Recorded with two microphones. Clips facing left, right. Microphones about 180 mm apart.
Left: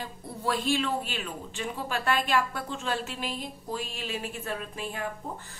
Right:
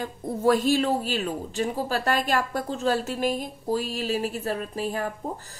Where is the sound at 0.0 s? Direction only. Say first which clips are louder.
Right 10 dB; 45° right (ahead or behind).